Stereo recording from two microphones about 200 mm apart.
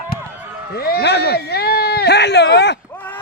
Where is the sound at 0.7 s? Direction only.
50° left (ahead or behind).